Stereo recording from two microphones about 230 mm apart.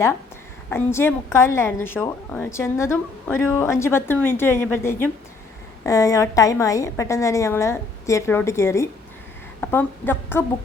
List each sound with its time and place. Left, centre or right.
0.7 s a woman's voice: centre